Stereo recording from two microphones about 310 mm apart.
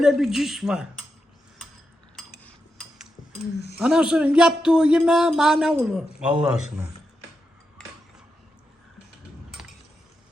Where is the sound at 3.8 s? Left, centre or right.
Centre.